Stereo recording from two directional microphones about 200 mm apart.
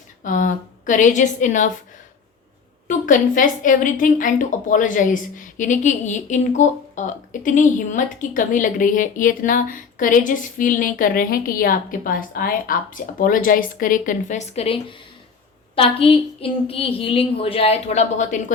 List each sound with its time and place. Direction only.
0.2 s a woman's voice: 40° left (ahead or behind)
2.8 s a woman's voice: 40° left (ahead or behind)